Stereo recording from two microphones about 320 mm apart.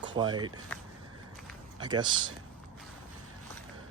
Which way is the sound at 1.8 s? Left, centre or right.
Centre.